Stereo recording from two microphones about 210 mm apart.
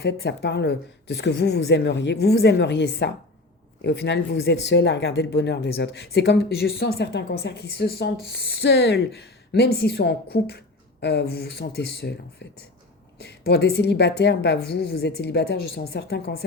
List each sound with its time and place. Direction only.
0.0 s speech: 55° left (ahead or behind)
13.1 s speech: 50° left (ahead or behind)